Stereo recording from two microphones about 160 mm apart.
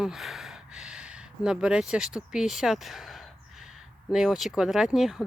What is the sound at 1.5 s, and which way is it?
Speech, 5° right (ahead or behind).